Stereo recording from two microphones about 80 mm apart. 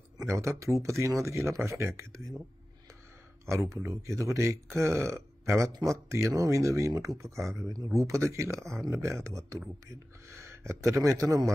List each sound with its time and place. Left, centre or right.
0.2 s speech: right
3.8 s speech: right
7.4 s speech: centre
8.0 s speech: right
8.5 s speech: centre
9.0 s speech: right